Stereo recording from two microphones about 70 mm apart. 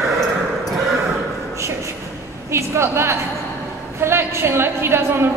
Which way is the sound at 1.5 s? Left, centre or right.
Right.